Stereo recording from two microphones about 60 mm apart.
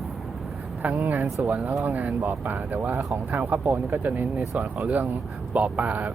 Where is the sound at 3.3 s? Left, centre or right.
Right.